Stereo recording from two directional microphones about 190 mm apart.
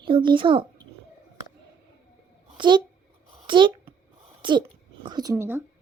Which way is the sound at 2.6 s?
25° right (ahead or behind).